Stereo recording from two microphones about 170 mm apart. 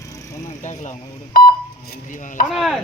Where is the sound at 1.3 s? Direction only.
60° left (ahead or behind).